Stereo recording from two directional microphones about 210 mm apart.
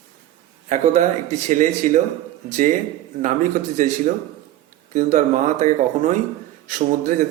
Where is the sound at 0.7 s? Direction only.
35° right (ahead or behind).